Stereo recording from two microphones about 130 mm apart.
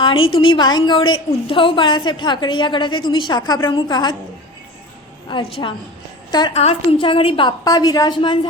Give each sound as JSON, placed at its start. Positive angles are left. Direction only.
{"t": 0.0, "sound": "a woman's voice", "side_deg": 40}
{"t": 5.3, "sound": "a woman's voice", "side_deg": 45}
{"t": 7.6, "sound": "a woman's voice", "side_deg": 30}